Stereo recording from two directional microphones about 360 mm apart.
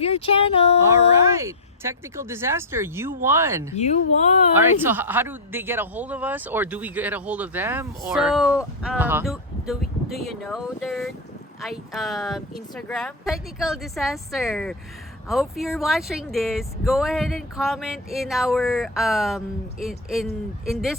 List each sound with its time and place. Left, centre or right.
0.0 s speech: centre
1.4 s speech: centre